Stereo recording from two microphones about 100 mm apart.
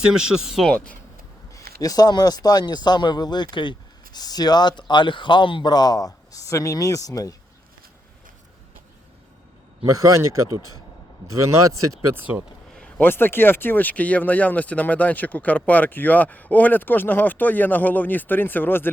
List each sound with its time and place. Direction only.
0.1 s speech: 5° right (ahead or behind)
1.5 s speech: 35° left (ahead or behind)
9.8 s a man's voice: 30° right (ahead or behind)
12.7 s speech: 15° left (ahead or behind)